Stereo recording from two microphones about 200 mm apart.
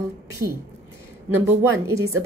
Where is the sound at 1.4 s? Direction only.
15° right (ahead or behind).